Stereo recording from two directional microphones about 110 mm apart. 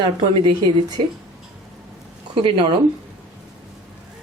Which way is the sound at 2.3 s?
50° right (ahead or behind).